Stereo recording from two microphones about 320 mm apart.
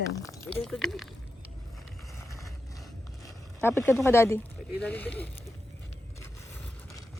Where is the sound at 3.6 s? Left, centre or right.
Centre.